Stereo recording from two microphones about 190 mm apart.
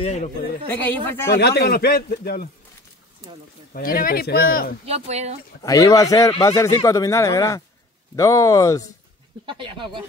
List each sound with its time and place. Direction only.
0.0 s a man's voice: 35° left (ahead or behind)
0.7 s speech: 10° left (ahead or behind)
1.4 s a man's voice: 55° left (ahead or behind)
3.7 s speech: 50° left (ahead or behind)
4.8 s speech: 35° right (ahead or behind)
5.6 s speech: 20° left (ahead or behind)
9.5 s speech: 25° right (ahead or behind)